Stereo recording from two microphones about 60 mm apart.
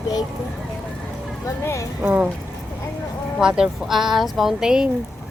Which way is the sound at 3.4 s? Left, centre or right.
Centre.